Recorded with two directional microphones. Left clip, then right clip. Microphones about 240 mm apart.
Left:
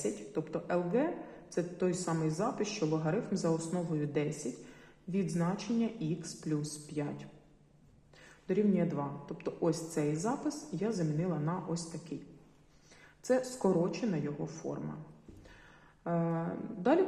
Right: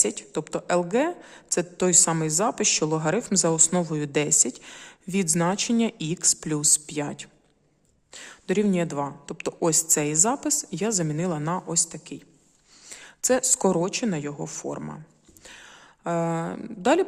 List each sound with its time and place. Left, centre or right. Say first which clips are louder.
0.0 s a woman's voice: right 9 dB; right
16.0 s a woman's voice: right 9 dB; right